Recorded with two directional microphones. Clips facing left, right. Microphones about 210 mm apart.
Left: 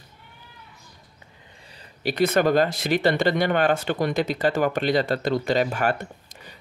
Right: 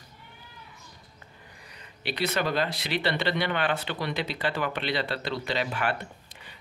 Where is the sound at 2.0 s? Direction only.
45° left (ahead or behind).